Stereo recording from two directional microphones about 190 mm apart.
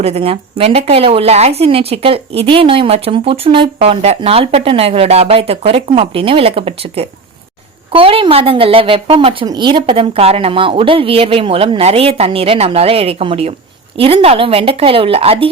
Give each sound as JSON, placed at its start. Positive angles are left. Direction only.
{"t": 0.0, "sound": "a woman's voice", "side_deg": -30}